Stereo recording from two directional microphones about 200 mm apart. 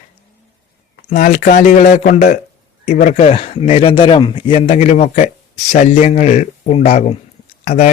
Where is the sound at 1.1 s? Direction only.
40° left (ahead or behind).